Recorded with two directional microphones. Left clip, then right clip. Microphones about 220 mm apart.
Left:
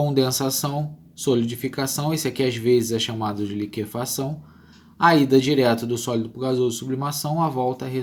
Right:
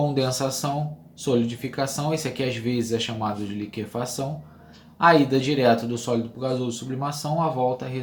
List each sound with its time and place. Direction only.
0.0 s speech: 45° left (ahead or behind)